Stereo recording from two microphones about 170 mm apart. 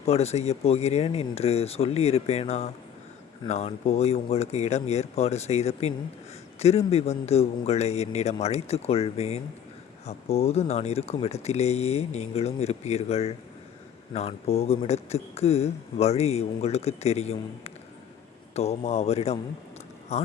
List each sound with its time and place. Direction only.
0.0 s speech: 40° left (ahead or behind)